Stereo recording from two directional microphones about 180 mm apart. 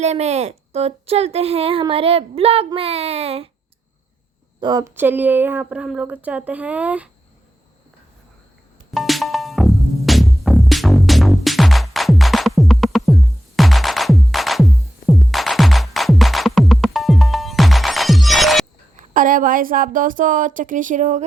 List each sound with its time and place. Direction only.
0.0 s speech: 40° right (ahead or behind)
4.6 s a woman's voice: 20° right (ahead or behind)
4.9 s speech: 10° right (ahead or behind)
8.9 s music: centre (ahead or behind)
18.9 s speech: 50° right (ahead or behind)